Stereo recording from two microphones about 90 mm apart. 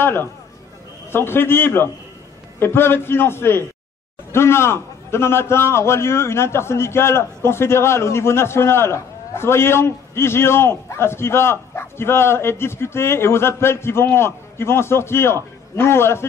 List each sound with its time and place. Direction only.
0.0 s a man's voice: 25° left (ahead or behind)